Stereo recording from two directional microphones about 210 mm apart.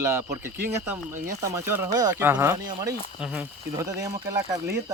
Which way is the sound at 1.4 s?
15° right (ahead or behind).